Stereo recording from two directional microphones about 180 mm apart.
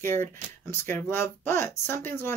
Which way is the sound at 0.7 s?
15° left (ahead or behind).